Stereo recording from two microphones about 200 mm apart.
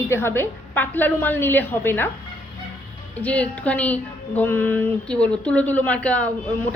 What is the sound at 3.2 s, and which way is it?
A woman's voice, 5° left (ahead or behind).